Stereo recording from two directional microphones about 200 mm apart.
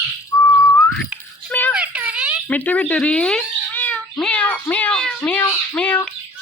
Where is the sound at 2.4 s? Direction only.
10° left (ahead or behind).